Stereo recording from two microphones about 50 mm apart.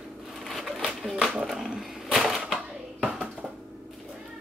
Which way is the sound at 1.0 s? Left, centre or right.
Centre.